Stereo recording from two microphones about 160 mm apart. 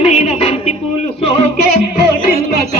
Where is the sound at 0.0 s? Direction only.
40° left (ahead or behind).